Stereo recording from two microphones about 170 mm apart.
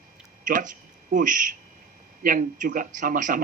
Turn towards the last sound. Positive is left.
turn(degrees=-55)  # may be behind; listen again after turning